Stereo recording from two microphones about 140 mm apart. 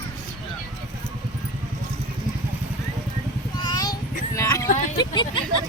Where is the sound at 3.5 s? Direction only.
30° left (ahead or behind).